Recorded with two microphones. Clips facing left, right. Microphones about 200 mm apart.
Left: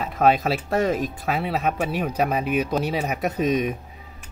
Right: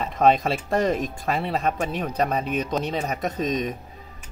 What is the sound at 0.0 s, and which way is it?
Speech, 5° left (ahead or behind).